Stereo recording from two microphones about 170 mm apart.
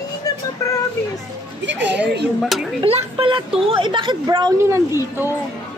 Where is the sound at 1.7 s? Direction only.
90° right.